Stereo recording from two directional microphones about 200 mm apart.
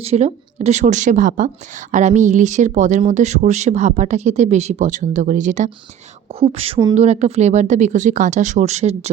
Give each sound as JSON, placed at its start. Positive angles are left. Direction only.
{"t": 0.0, "sound": "speech", "side_deg": -30}